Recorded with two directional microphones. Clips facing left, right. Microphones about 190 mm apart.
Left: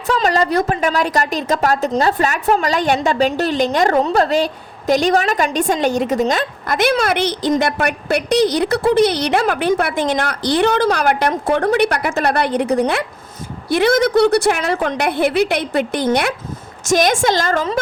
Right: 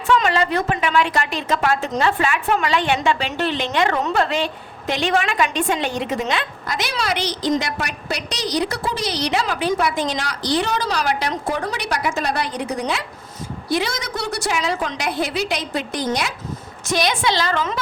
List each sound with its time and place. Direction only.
0.1 s a woman's voice: 40° left (ahead or behind); by 16.3 s 60° left (ahead or behind)
16.8 s a woman's voice: 45° left (ahead or behind)